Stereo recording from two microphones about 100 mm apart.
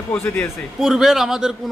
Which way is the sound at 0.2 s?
25° left (ahead or behind).